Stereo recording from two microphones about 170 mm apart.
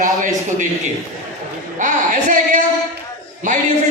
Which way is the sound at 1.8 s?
50° right (ahead or behind).